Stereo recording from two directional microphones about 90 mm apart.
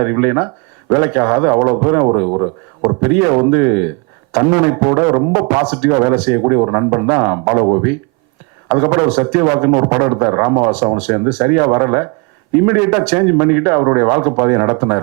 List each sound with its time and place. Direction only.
0.0 s a man's voice: 20° right (ahead or behind)